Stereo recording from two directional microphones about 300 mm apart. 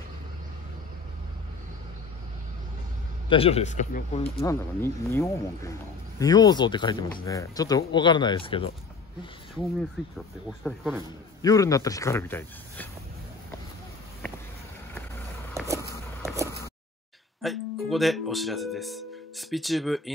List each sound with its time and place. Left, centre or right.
3.3 s speech: centre
4.4 s speech: centre
10.6 s a man's voice: centre
11.4 s speech: centre
16.2 s a sound: centre
17.4 s speech: centre